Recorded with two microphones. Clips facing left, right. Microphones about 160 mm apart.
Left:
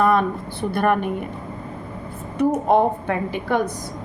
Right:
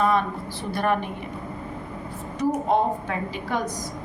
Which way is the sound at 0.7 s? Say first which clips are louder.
Left 4 dB; 55° left (ahead or behind).